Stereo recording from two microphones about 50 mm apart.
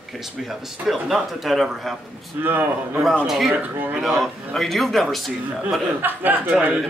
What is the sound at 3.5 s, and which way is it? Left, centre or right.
Speech, right.